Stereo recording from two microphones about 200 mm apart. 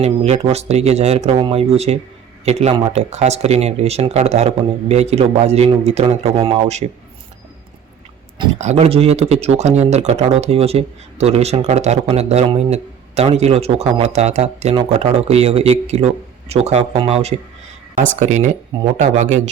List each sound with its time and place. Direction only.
0.0 s speech: 30° right (ahead or behind)
8.5 s speech: 35° right (ahead or behind)